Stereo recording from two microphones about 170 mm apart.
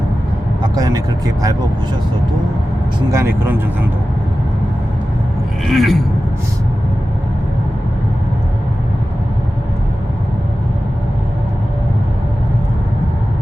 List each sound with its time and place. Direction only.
0.6 s speech: 20° right (ahead or behind)
3.1 s speech: 15° right (ahead or behind)
5.6 s speech: centre (ahead or behind)